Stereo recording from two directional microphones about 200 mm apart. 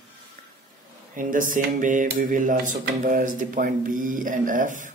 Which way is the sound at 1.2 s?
40° right (ahead or behind).